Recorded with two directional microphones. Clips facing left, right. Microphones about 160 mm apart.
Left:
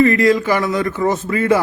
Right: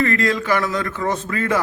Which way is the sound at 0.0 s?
15° left (ahead or behind).